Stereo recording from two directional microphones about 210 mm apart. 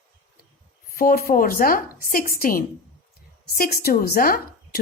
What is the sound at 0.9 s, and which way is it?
A woman's voice, 45° left (ahead or behind).